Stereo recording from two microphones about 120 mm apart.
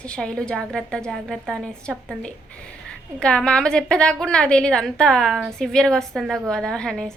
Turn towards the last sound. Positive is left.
turn(degrees=5)  # may be behind; listen again after turning